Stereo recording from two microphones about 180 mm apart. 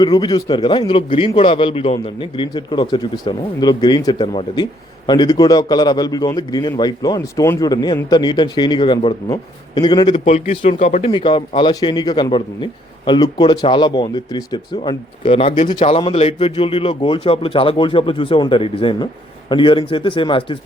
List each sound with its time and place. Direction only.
0.0 s a man's voice: 25° left (ahead or behind)